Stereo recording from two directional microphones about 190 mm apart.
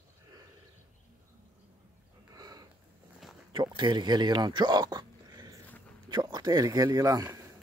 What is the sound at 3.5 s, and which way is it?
Speech, 25° right (ahead or behind).